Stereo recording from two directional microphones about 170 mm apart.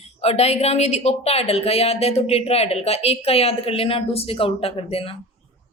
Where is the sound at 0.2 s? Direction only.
40° left (ahead or behind).